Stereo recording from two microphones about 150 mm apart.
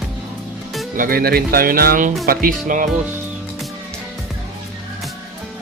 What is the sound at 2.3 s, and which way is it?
Speech, 65° right (ahead or behind).